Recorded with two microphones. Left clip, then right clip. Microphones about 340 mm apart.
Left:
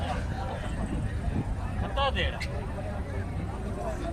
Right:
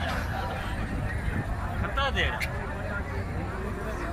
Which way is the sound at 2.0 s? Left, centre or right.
Left.